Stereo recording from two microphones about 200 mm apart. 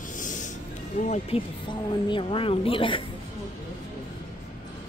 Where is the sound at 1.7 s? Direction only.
25° left (ahead or behind).